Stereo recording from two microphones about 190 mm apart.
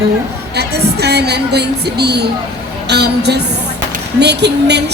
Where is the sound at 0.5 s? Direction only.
60° right (ahead or behind).